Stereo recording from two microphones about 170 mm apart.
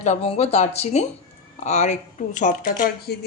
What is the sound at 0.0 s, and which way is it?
Speech, 40° left (ahead or behind).